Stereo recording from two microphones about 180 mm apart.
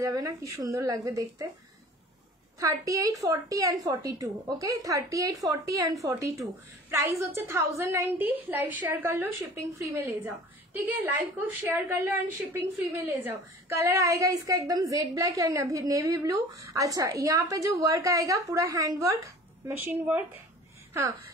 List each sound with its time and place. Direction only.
0.0 s a woman's voice: 20° right (ahead or behind)
2.6 s a woman's voice: 20° right (ahead or behind)